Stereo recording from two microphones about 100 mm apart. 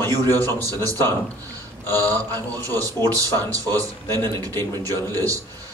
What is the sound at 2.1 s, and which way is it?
Speech, 35° right (ahead or behind).